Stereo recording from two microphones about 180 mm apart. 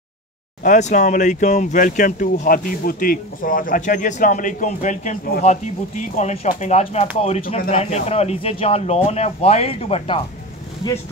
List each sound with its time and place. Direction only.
0.7 s speech: 40° left (ahead or behind)